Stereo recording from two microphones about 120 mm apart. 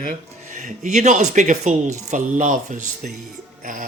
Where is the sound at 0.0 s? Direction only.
90° right.